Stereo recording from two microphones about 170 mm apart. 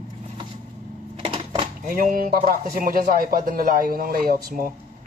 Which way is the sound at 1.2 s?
35° right (ahead or behind).